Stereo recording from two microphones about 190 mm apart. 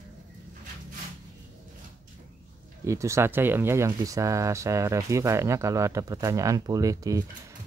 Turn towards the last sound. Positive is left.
turn(degrees=-15)  # may be behind; listen again after turning